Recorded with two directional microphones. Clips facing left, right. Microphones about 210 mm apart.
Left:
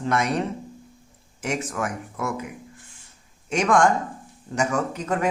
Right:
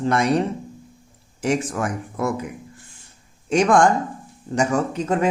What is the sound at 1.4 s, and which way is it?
Speech, 30° right (ahead or behind).